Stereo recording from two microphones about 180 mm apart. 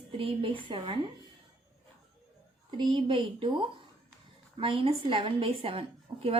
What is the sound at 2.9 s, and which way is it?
A woman's voice, 30° right (ahead or behind).